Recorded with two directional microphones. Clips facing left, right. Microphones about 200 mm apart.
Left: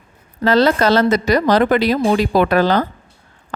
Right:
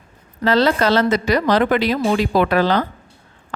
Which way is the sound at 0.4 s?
45° left (ahead or behind).